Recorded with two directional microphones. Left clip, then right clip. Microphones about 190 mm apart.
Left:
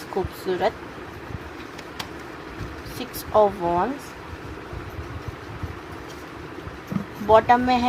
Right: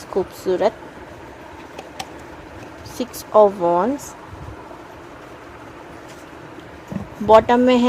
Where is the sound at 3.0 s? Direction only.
50° right (ahead or behind).